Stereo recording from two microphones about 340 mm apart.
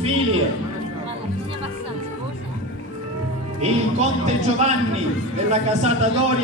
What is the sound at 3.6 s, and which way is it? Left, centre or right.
A man's voice, centre.